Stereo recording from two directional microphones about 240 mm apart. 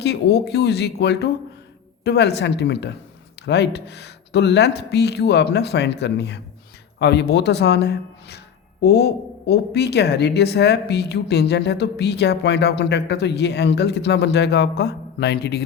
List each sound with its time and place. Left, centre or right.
0.0 s speech: left